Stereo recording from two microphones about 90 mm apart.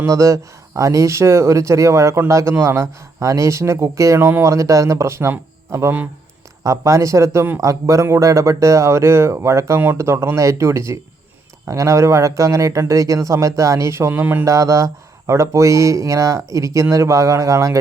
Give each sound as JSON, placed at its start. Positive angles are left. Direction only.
{"t": 0.0, "sound": "speech", "side_deg": -35}
{"t": 6.6, "sound": "speech", "side_deg": -35}
{"t": 14.4, "sound": "speech", "side_deg": -35}